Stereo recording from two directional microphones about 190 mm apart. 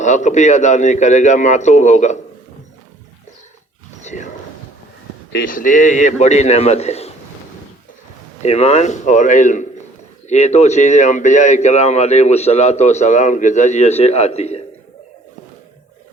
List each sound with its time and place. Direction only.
0.0 s speech: 40° left (ahead or behind)
4.0 s a sound: 40° left (ahead or behind)
5.5 s speech: 45° left (ahead or behind)
8.4 s speech: 35° left (ahead or behind)